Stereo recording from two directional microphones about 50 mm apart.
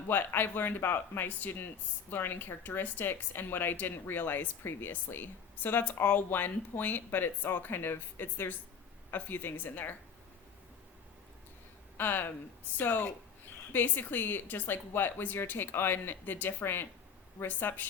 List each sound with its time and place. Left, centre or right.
0.1 s speech: left
11.9 s speech: left